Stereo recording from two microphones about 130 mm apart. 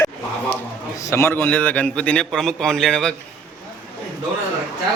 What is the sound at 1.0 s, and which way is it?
A man's voice, 25° left (ahead or behind).